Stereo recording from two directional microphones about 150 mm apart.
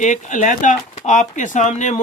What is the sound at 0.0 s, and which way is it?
Speech, 55° left (ahead or behind).